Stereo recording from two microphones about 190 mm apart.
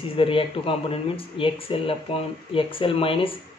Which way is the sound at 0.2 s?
30° left (ahead or behind).